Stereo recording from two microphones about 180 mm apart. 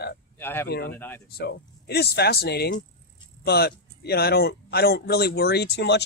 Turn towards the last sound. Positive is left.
turn(degrees=70)  # may be behind; listen again after turning